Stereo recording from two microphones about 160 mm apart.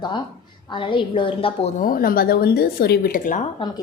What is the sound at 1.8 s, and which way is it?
Speech, 60° left (ahead or behind).